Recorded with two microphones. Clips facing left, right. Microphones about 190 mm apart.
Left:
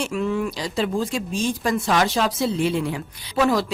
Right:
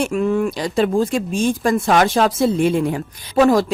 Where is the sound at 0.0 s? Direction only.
50° right (ahead or behind).